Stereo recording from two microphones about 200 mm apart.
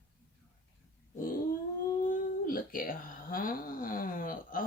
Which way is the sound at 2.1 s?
45° left (ahead or behind).